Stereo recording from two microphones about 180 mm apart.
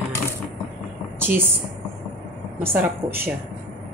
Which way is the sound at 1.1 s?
10° right (ahead or behind).